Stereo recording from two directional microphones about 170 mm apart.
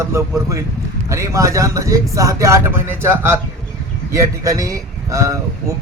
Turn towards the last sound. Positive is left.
turn(degrees=-20)  # may be behind; listen again after turning